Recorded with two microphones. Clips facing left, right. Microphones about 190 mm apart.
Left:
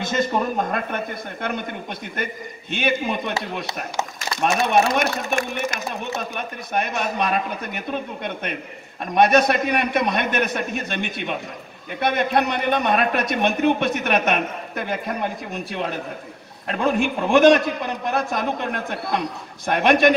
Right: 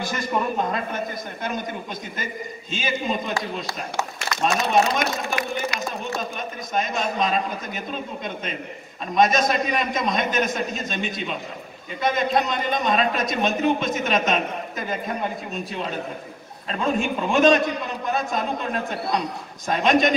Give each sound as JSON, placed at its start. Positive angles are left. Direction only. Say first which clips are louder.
{"t": 0.0, "sound": "a man's voice", "louder": "left 6 dB", "side_deg": 25}
{"t": 0.7, "sound": "a man's voice", "louder": "left 1 dB", "side_deg": 60}
{"t": 4.4, "sound": "a man's voice", "louder": "left 2 dB", "side_deg": 60}
{"t": 5.7, "sound": "speech", "louder": "right 1 dB", "side_deg": 50}
{"t": 6.1, "sound": "a man's voice", "louder": "left 1 dB", "side_deg": 65}